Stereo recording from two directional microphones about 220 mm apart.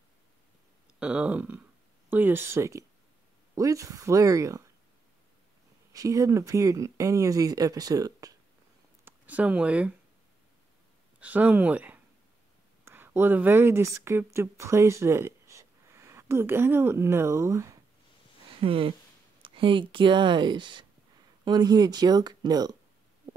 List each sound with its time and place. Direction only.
0.9 s speech: 5° right (ahead or behind)
5.9 s speech: 15° right (ahead or behind)
11.1 s speech: 5° right (ahead or behind)
18.6 s speech: 25° right (ahead or behind)